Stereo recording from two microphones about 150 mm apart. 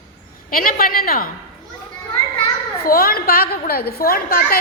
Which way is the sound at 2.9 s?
80° left.